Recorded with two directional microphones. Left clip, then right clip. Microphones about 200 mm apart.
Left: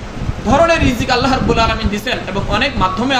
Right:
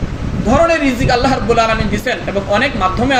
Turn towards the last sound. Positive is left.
turn(degrees=15)  # may be behind; listen again after turning